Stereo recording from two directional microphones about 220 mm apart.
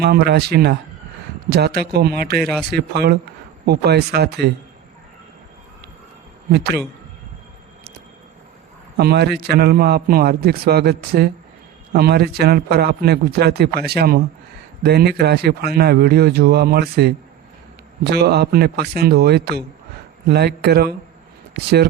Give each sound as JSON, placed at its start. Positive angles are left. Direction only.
{"t": 0.0, "sound": "a man's voice", "side_deg": -45}
{"t": 9.0, "sound": "a man's voice", "side_deg": -45}